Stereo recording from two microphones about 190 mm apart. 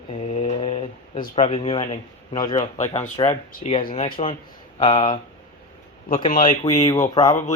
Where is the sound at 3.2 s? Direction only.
35° left (ahead or behind).